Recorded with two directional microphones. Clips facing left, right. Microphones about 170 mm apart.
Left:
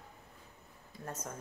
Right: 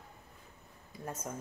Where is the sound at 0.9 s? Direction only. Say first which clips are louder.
Right 2 dB; 10° right (ahead or behind).